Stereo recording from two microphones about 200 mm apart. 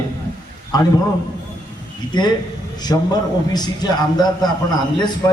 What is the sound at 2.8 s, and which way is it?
A man's voice, 20° left (ahead or behind).